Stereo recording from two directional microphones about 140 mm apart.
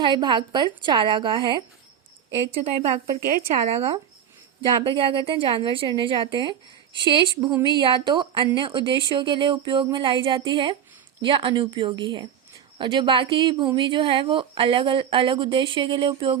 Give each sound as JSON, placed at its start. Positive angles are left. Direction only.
{"t": 0.0, "sound": "a woman's voice", "side_deg": -35}
{"t": 2.6, "sound": "a woman's voice", "side_deg": -45}